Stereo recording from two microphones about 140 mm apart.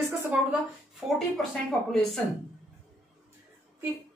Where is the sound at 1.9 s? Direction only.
Centre (ahead or behind).